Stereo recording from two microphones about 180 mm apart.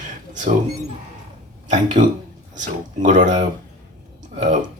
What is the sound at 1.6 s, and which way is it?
Speech, 45° right (ahead or behind).